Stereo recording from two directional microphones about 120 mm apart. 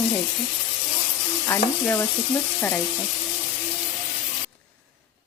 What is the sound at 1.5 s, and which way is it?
Speech, 15° left (ahead or behind).